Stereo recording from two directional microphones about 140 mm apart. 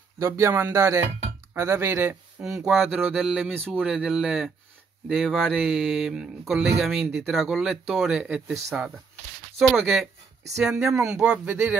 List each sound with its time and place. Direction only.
0.2 s speech: 15° right (ahead or behind)
2.4 s speech: 5° right (ahead or behind)
3.5 s speech: 15° right (ahead or behind)
3.8 s speech: 5° right (ahead or behind)